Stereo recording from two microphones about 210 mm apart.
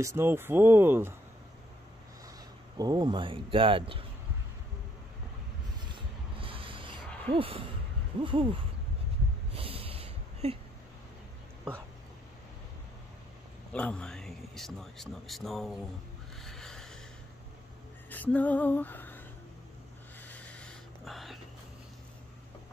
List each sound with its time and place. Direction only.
0.0 s speech: 10° right (ahead or behind)
2.8 s speech: 20° right (ahead or behind)
5.8 s a sound: 20° right (ahead or behind)
7.2 s speech: 25° right (ahead or behind)
9.5 s snort: 25° right (ahead or behind)
13.7 s speech: 5° left (ahead or behind)
16.3 s a sound: centre (ahead or behind)
18.1 s music: 5° left (ahead or behind)
20.2 s a sound: 5° left (ahead or behind)